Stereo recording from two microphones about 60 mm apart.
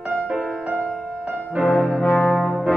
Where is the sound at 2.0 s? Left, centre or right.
Left.